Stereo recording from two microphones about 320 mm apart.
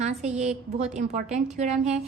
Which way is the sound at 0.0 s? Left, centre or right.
Right.